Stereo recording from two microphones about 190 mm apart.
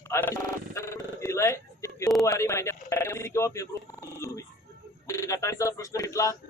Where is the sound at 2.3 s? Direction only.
15° left (ahead or behind).